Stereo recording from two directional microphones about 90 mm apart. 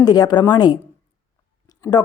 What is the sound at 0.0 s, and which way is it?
Speech, 50° left (ahead or behind).